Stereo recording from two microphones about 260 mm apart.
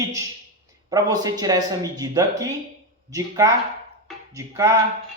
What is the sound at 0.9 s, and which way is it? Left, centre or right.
A man's voice, centre.